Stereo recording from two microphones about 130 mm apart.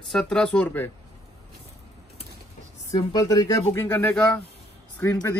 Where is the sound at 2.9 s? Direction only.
30° left (ahead or behind).